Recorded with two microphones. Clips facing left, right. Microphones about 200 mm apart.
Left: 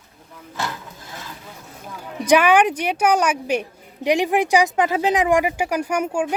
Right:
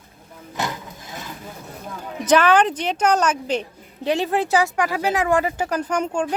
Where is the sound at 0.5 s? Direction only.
20° right (ahead or behind).